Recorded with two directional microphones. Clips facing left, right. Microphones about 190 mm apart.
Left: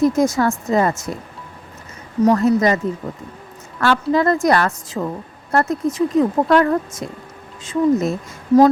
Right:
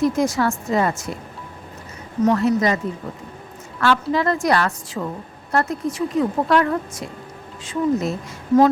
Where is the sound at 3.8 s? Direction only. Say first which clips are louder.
Left 3 dB; 45° left (ahead or behind).